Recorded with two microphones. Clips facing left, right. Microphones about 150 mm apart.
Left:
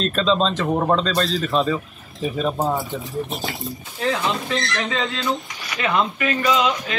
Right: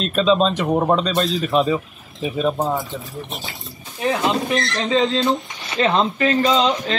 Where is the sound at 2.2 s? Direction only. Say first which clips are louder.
Right 1 dB; centre (ahead or behind).